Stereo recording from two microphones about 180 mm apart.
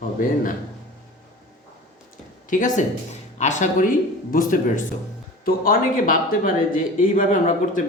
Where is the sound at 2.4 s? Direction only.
45° left (ahead or behind).